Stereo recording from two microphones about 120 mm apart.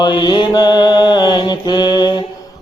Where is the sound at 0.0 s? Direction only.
40° left (ahead or behind).